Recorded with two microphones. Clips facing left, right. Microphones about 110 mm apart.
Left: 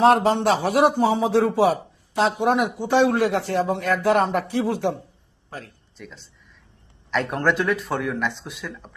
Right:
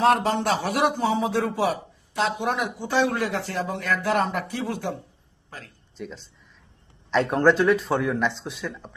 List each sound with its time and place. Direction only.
0.0 s a man's voice: 30° left (ahead or behind)
7.4 s speech: 5° right (ahead or behind)